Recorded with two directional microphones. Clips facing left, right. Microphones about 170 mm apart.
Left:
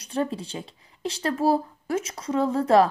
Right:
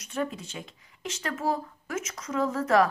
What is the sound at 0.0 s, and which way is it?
Speech, 30° left (ahead or behind).